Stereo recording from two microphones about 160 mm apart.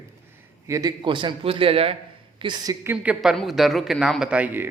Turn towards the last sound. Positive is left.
turn(degrees=-10)  # may be behind; listen again after turning